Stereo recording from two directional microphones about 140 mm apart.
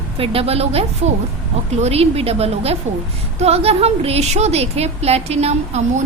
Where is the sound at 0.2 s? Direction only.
45° right (ahead or behind).